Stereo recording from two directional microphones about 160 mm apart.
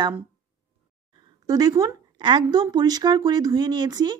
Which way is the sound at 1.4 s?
25° right (ahead or behind).